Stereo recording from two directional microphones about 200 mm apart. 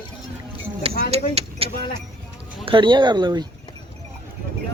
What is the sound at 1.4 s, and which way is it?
Speech, 30° right (ahead or behind).